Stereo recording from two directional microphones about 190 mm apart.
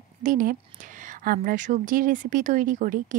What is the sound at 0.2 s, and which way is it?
A woman's voice, 45° right (ahead or behind).